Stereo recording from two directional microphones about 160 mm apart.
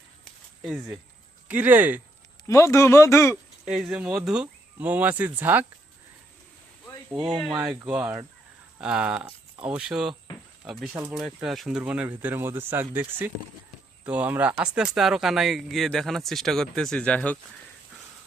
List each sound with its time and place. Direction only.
0.6 s speech: centre (ahead or behind)
1.5 s speech: 10° right (ahead or behind)
2.5 s speech: 20° left (ahead or behind)
3.8 s speech: 5° right (ahead or behind)
7.1 s speech: 30° right (ahead or behind)
7.6 s speech: 5° right (ahead or behind)